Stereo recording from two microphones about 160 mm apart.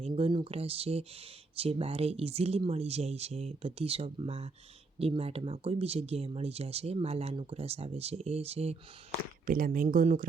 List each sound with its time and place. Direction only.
0.1 s speech: 30° right (ahead or behind)
9.5 s speech: 60° right (ahead or behind)